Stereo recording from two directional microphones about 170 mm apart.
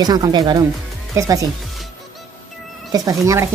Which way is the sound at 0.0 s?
25° right (ahead or behind).